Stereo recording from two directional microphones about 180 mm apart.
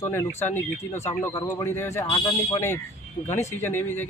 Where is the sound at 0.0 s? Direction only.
15° left (ahead or behind).